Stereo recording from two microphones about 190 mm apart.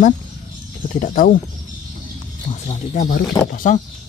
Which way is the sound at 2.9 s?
45° left (ahead or behind).